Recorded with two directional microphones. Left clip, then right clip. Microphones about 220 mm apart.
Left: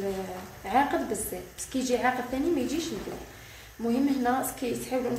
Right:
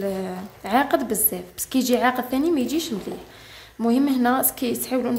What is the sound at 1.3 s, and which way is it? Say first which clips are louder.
A woman's voice: right 8 dB; 50° right (ahead or behind).